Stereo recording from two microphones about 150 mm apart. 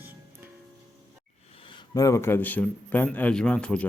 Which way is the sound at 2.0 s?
20° left (ahead or behind).